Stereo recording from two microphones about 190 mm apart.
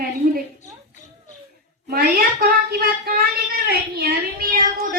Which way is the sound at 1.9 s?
50° right (ahead or behind).